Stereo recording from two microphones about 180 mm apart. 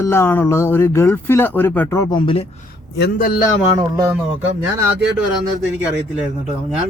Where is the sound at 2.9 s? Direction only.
65° left (ahead or behind).